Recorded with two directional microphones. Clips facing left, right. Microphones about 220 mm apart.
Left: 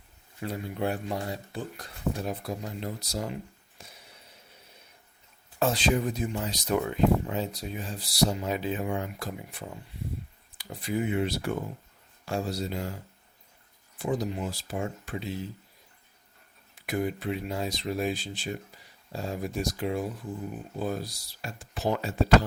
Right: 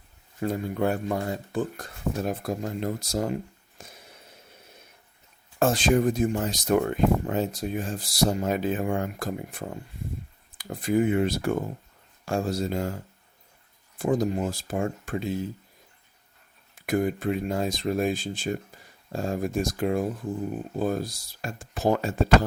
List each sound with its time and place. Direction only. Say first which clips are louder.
0.4 s speech: right 5 dB; 45° right (ahead or behind)
3.8 s a sound: right 4 dB; 50° right (ahead or behind)
5.5 s speech: right 4 dB; 50° right (ahead or behind)
14.0 s speech: right 5 dB; 50° right (ahead or behind)
16.7 s speech: right 5 dB; 50° right (ahead or behind)